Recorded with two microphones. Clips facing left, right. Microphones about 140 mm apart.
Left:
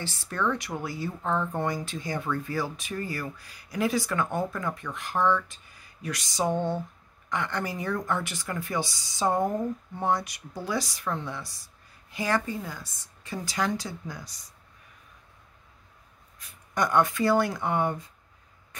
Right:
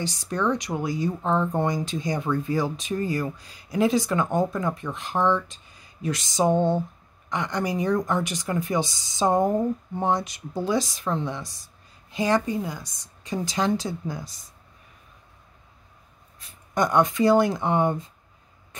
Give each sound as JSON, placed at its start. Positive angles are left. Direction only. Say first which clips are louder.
{"t": 0.0, "sound": "speech", "louder": "right 4 dB", "side_deg": -15}
{"t": 16.3, "sound": "speech", "louder": "right 4 dB", "side_deg": -20}